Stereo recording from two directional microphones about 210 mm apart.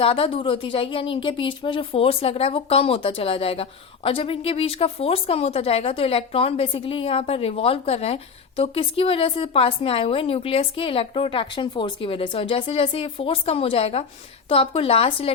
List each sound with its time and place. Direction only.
0.0 s a woman's voice: 25° left (ahead or behind)